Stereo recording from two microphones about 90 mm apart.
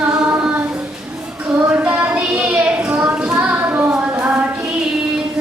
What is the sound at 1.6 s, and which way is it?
Child singing, 15° right (ahead or behind).